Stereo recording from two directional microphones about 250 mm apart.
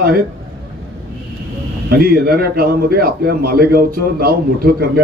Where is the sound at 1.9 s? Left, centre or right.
Right.